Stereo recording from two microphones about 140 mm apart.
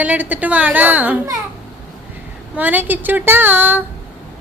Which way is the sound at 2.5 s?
10° right (ahead or behind).